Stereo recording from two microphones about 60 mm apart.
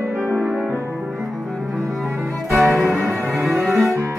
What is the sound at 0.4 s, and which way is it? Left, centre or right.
Music, right.